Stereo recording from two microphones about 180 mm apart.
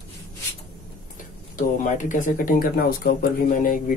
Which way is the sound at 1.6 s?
45° left (ahead or behind).